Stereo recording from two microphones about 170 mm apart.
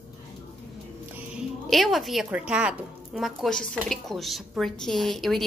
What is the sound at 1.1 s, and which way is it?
A woman's voice, 5° right (ahead or behind).